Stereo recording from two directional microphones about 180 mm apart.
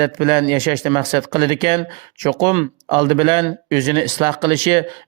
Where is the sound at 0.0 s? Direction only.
25° right (ahead or behind).